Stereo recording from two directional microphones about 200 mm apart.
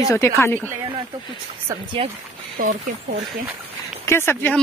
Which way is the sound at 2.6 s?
45° right (ahead or behind).